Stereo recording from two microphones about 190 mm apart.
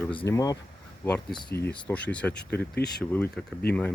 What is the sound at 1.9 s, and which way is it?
Speech, 5° left (ahead or behind).